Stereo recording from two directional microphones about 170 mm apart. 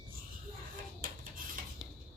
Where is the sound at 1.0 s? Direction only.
55° right (ahead or behind).